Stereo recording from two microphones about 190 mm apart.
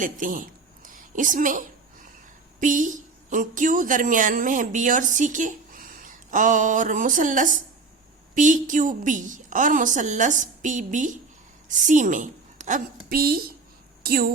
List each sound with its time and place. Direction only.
0.0 s a man's voice: 45° right (ahead or behind)
0.9 s a sound: 45° right (ahead or behind)
2.6 s a woman's voice: 45° right (ahead or behind)